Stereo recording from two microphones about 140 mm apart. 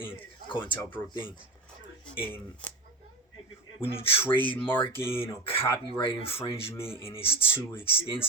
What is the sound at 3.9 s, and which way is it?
Speech, 40° left (ahead or behind).